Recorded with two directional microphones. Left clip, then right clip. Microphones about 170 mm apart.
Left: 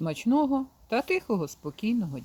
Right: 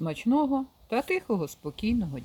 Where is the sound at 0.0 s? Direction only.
5° left (ahead or behind).